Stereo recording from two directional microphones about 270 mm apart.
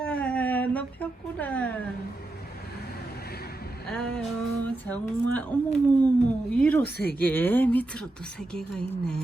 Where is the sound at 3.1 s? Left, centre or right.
Left.